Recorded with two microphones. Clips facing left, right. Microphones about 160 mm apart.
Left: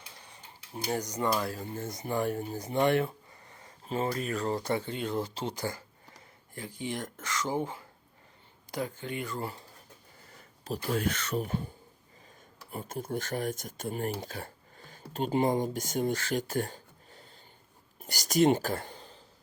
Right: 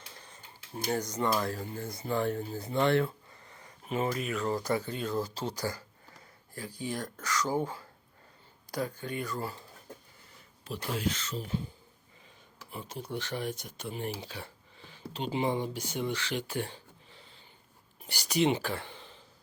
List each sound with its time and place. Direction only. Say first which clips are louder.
0.3 s speech: even; 15° left (ahead or behind)
3.8 s speech: even; 30° left (ahead or behind)
10.6 s speech: left 3 dB; 45° left (ahead or behind)
12.7 s speech: left 3 dB; 45° left (ahead or behind)